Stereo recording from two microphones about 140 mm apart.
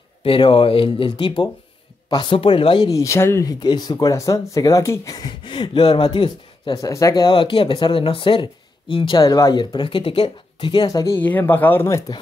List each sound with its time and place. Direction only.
0.2 s speech: 40° left (ahead or behind)
2.9 s speech: 20° left (ahead or behind)
7.3 s speech: 40° left (ahead or behind)
9.2 s speech: 25° left (ahead or behind)
11.1 s speech: 15° left (ahead or behind)